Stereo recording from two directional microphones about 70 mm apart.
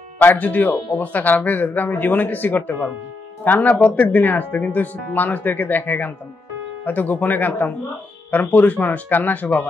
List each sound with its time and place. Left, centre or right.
0.2 s speech: left